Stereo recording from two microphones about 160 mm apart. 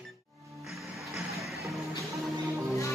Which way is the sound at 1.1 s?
Centre (ahead or behind).